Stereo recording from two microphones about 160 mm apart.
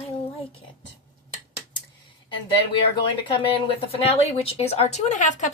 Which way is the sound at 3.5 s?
35° left (ahead or behind).